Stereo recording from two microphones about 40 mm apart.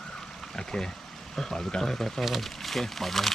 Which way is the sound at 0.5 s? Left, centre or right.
Centre.